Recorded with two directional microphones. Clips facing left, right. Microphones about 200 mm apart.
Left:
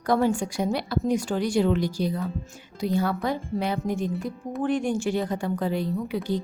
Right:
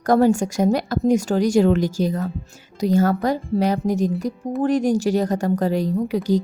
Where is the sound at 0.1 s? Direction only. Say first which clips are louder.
Right 6 dB; 45° right (ahead or behind).